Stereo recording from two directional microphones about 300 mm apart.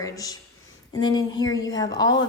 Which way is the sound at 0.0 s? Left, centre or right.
Centre.